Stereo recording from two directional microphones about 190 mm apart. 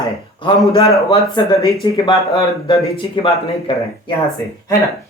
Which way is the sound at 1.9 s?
20° left (ahead or behind).